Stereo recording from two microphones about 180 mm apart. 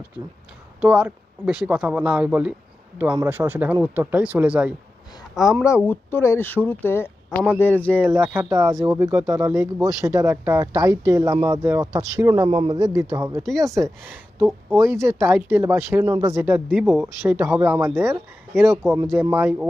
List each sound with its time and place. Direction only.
0.7 s speech: 5° right (ahead or behind)
5.9 s speech: 10° left (ahead or behind)
8.1 s speech: 15° right (ahead or behind)